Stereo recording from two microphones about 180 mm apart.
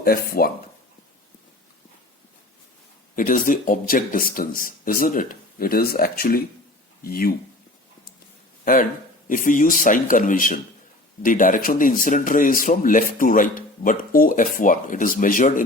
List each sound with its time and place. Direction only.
0.0 s speech: 55° left (ahead or behind)
3.2 s a man's voice: 50° left (ahead or behind)
8.6 s a man's voice: 50° left (ahead or behind)